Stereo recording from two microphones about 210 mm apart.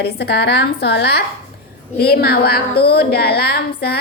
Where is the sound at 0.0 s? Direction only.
50° left (ahead or behind).